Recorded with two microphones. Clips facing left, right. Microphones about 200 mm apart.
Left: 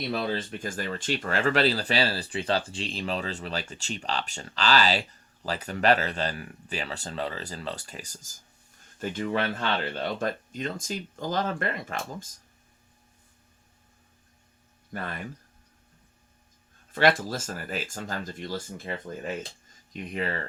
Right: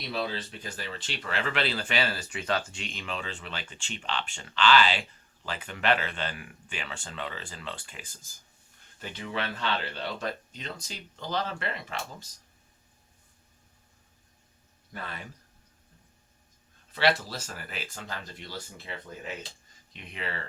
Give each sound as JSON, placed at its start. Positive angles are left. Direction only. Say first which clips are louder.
{"t": 0.1, "sound": "speech", "louder": "left 1 dB", "side_deg": 50}
{"t": 16.9, "sound": "speech", "louder": "left 4 dB", "side_deg": 50}